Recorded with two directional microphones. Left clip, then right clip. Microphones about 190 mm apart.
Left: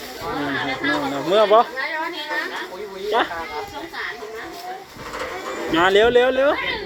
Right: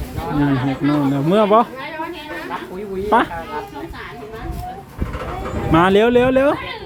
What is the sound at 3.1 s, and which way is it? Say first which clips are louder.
Speech: right 5 dB; 15° right (ahead or behind).